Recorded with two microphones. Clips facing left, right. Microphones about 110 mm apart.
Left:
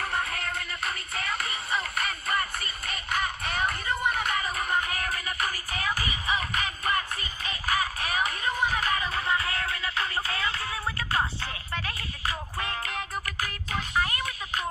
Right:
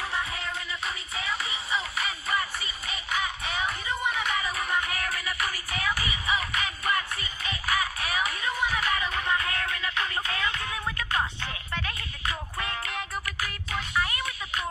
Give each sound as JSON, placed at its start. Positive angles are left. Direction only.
{"t": 0.0, "sound": "music", "side_deg": 55}